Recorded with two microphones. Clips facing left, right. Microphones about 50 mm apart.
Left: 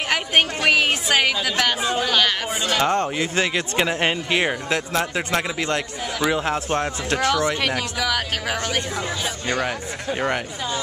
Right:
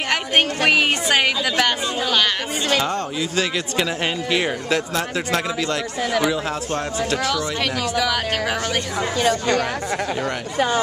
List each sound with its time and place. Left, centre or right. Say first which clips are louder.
0.1 s speech: even; centre
2.8 s speech: left 3 dB; left
7.6 s speech: right 2 dB; centre